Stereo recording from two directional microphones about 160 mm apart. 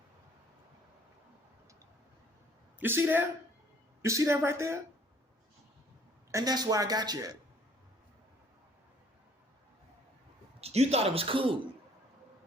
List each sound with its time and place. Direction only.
2.8 s speech: 15° right (ahead or behind)
6.3 s speech: 25° right (ahead or behind)
10.6 s speech: 40° right (ahead or behind)